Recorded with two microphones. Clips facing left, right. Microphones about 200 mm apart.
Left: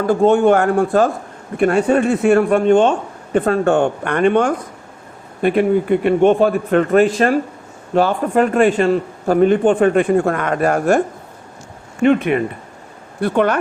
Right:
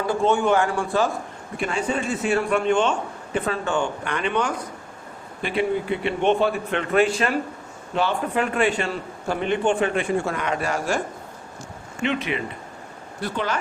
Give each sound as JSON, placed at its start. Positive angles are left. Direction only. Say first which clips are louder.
{"t": 0.0, "sound": "a man's voice", "louder": "left 8 dB", "side_deg": 50}
{"t": 12.0, "sound": "a man's voice", "louder": "left 11 dB", "side_deg": 50}